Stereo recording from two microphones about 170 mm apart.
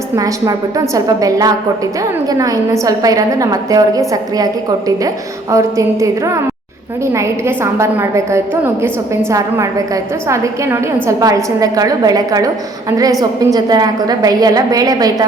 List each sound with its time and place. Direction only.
0.2 s a woman's voice: 20° right (ahead or behind)